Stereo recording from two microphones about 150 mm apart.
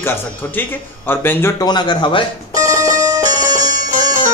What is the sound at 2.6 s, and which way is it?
Music, 20° right (ahead or behind).